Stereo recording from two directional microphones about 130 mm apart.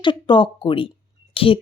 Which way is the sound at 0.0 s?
35° left (ahead or behind).